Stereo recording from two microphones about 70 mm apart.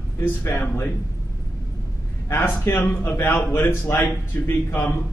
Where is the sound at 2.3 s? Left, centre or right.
Left.